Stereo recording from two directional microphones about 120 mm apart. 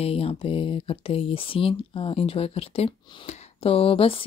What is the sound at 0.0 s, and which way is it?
Speech, 55° left (ahead or behind).